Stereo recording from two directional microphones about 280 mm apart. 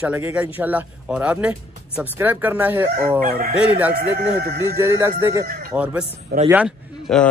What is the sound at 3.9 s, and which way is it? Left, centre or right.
Speech, right.